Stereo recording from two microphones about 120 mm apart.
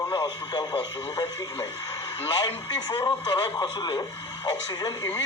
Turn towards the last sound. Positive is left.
turn(degrees=35)  # may be behind; listen again after turning